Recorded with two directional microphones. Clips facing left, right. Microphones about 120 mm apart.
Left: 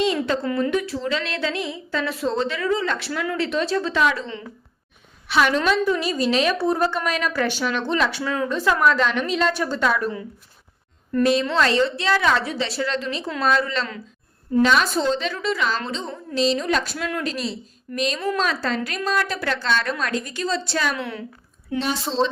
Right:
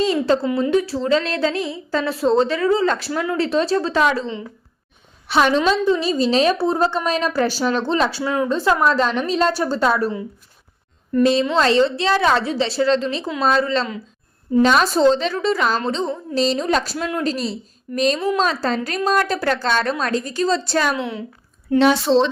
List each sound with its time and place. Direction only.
0.0 s a sound: 35° right (ahead or behind)
0.4 s a woman's voice: 15° right (ahead or behind)
0.7 s a woman's voice: 35° right (ahead or behind)
11.2 s a woman's voice: 25° right (ahead or behind); by 20.9 s 45° right (ahead or behind)
20.9 s a woman's voice: 20° right (ahead or behind)
21.8 s speech: 75° right (ahead or behind)